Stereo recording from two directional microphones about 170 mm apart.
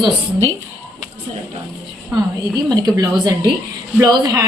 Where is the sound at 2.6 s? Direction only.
25° right (ahead or behind).